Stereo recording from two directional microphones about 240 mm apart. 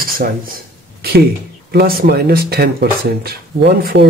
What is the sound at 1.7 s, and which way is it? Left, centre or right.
Speech, right.